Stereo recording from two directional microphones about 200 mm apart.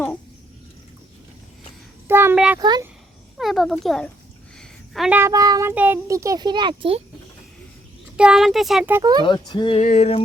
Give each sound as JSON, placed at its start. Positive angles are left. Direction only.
{"t": 2.0, "sound": "a sound", "side_deg": -10}
{"t": 2.6, "sound": "speech", "side_deg": -20}
{"t": 3.3, "sound": "a child's voice", "side_deg": 0}
{"t": 8.1, "sound": "speech", "side_deg": -5}
{"t": 9.2, "sound": "speech", "side_deg": 20}
{"t": 9.8, "sound": "a sound", "side_deg": 35}